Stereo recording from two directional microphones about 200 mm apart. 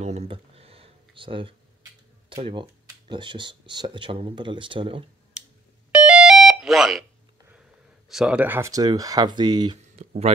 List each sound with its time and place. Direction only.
0.0 s a sound: 30° right (ahead or behind)
2.2 s speech: 25° right (ahead or behind)
5.9 s music: 5° right (ahead or behind)
8.1 s speech: 5° right (ahead or behind); by 9.8 s 20° right (ahead or behind)
9.9 s speech: 35° right (ahead or behind)